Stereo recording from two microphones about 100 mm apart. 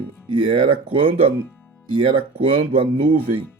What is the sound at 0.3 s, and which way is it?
Speech, 65° right (ahead or behind).